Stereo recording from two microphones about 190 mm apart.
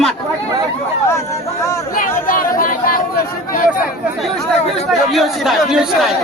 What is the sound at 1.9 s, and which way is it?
Speech, 50° left (ahead or behind).